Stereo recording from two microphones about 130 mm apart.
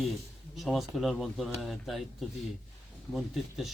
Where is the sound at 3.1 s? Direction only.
Centre (ahead or behind).